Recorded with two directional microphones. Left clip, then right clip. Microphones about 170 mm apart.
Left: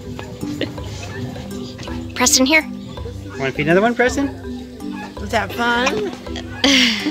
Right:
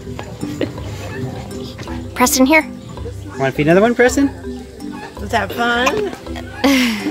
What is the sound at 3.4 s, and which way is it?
Speech, 70° right (ahead or behind).